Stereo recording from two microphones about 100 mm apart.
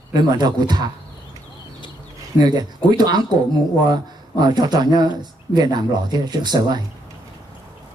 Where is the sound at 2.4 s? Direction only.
45° right (ahead or behind).